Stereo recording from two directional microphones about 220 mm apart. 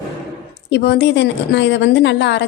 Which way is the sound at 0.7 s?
50° left (ahead or behind).